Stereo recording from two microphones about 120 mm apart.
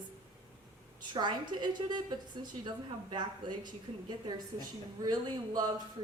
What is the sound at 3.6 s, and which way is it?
A woman's voice, 35° right (ahead or behind).